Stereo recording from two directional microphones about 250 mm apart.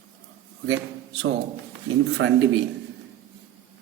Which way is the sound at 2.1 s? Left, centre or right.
Right.